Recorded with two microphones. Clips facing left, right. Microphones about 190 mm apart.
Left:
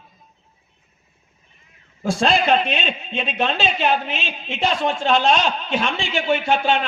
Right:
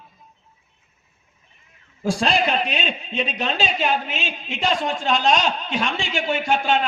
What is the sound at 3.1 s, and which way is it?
A woman's voice, 40° right (ahead or behind).